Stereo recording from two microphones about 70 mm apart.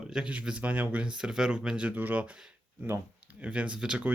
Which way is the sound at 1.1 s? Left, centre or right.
Centre.